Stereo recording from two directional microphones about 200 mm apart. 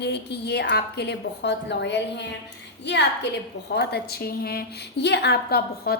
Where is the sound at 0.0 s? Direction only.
60° left (ahead or behind).